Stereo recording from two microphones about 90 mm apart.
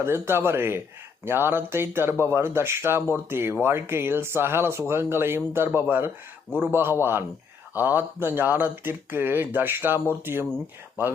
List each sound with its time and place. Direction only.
0.0 s speech: 25° right (ahead or behind)